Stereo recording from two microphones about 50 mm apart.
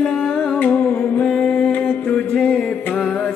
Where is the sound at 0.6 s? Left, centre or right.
Left.